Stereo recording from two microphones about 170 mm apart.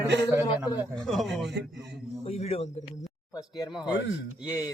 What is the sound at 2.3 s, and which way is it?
Speech, 35° left (ahead or behind).